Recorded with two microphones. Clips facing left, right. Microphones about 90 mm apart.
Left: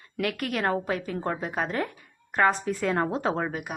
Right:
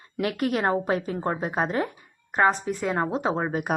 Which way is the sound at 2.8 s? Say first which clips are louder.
Right 1 dB; 10° right (ahead or behind).